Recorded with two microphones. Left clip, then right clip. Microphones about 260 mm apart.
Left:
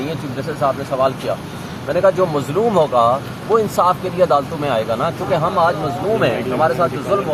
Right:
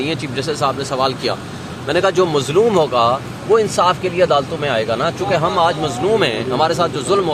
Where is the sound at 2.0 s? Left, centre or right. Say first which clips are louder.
Left 1 dB; right.